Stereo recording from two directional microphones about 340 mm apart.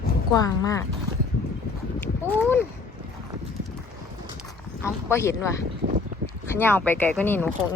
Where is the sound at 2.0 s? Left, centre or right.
Centre.